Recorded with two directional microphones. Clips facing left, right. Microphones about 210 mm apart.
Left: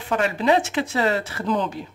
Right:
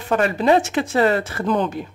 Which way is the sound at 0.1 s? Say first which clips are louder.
Right 3 dB; 45° right (ahead or behind).